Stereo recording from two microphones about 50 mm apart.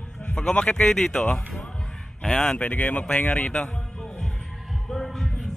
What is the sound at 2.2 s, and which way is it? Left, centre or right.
Speech, centre.